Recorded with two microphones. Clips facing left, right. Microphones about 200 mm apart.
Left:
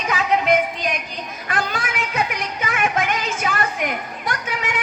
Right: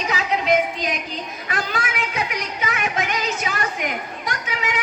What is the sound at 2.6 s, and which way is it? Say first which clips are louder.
Children playing: left 3 dB; 50° left (ahead or behind).